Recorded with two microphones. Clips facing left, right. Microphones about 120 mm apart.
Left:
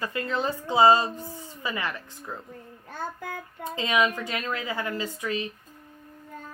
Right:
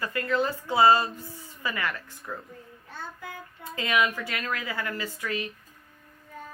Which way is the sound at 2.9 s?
45° left (ahead or behind).